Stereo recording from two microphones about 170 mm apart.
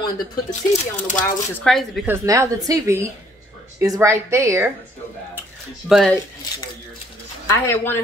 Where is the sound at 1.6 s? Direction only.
Centre (ahead or behind).